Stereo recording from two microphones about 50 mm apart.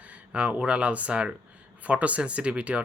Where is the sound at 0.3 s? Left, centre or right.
Right.